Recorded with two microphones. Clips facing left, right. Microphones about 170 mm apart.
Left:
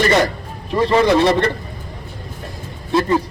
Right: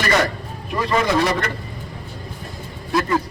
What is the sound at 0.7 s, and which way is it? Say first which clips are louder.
Speech: left 6 dB; 30° left (ahead or behind).